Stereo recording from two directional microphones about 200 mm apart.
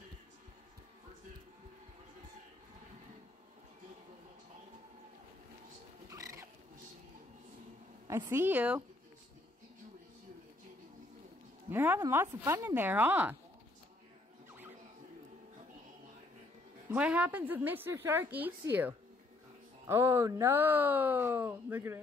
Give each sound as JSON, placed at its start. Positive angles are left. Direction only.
{"t": 6.0, "sound": "a sound", "side_deg": -15}
{"t": 8.1, "sound": "speech", "side_deg": -15}
{"t": 11.7, "sound": "speech", "side_deg": -10}
{"t": 16.9, "sound": "speech", "side_deg": -5}